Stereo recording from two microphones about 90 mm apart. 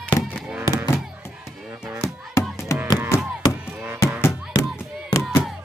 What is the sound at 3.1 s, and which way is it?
Chop, 30° left (ahead or behind).